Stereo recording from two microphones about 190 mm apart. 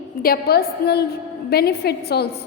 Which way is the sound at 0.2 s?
50° left (ahead or behind).